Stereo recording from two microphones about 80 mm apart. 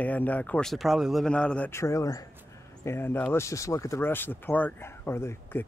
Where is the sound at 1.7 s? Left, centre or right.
Left.